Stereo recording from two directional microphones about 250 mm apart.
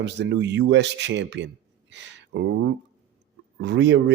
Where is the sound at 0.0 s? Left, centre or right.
Right.